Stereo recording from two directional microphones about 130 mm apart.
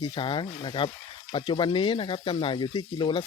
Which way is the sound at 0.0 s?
40° left (ahead or behind).